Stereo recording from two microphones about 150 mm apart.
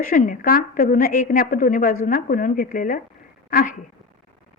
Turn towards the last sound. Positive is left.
turn(degrees=65)  # may be behind; listen again after turning